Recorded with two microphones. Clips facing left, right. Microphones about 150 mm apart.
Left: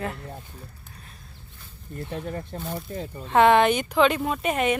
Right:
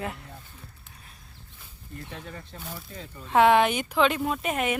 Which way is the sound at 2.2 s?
45° left (ahead or behind).